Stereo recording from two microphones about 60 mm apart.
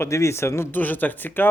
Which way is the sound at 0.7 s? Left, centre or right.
Left.